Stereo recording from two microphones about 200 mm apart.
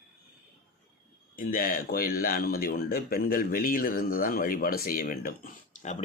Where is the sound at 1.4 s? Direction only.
45° left (ahead or behind).